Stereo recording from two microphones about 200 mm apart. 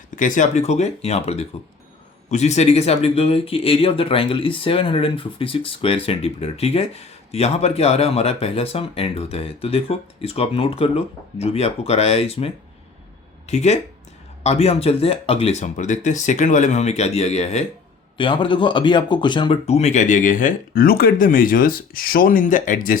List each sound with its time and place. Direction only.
0.2 s speech: 40° left (ahead or behind)